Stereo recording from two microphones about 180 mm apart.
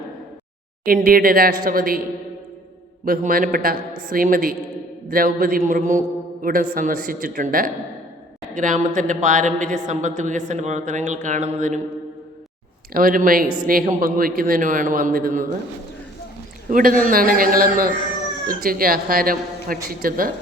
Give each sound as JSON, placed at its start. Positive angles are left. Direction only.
{"t": 0.9, "sound": "a man's voice", "side_deg": -50}
{"t": 3.0, "sound": "a man's voice", "side_deg": -50}
{"t": 12.9, "sound": "a man's voice", "side_deg": -50}
{"t": 16.6, "sound": "a man's voice", "side_deg": -50}